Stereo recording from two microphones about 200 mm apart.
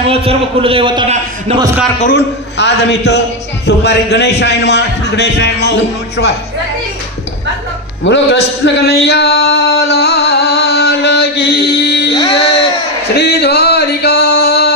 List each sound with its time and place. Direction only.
0.0 s a man's voice: 30° right (ahead or behind)
2.0 s a man's voice: 55° left (ahead or behind)
8.0 s a man's voice: 60° left (ahead or behind)
8.8 s music: 55° left (ahead or behind)
12.1 s a sound: 30° left (ahead or behind)
13.1 s a sound: 55° left (ahead or behind)